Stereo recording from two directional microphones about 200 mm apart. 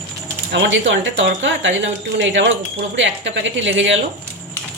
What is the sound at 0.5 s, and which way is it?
Speech, 65° right (ahead or behind).